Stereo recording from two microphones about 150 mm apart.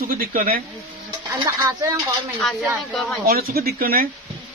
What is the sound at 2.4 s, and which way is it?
Speech, centre (ahead or behind).